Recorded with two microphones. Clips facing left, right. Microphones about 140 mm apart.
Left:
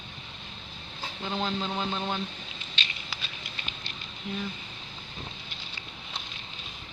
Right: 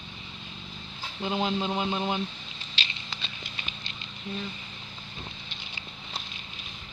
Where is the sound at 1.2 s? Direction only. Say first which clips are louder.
Right 3 dB; 10° right (ahead or behind).